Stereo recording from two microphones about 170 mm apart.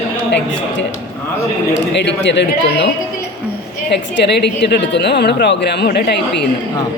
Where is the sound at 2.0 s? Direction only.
90° left.